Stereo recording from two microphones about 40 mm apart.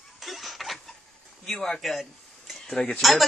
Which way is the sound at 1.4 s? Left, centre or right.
Centre.